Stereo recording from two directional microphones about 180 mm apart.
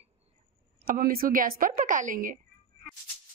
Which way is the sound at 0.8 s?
55° right (ahead or behind).